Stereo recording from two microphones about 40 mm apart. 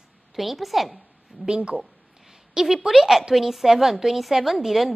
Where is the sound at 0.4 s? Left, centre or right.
Centre.